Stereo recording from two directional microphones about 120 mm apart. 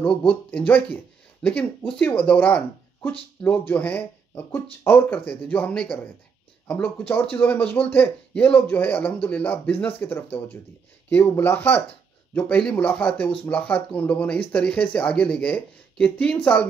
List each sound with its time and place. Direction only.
0.3 s speech: 10° left (ahead or behind)